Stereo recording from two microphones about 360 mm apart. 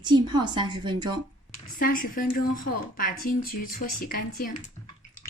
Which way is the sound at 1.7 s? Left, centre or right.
Left.